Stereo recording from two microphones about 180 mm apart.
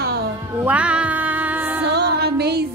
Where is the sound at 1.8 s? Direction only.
65° right (ahead or behind).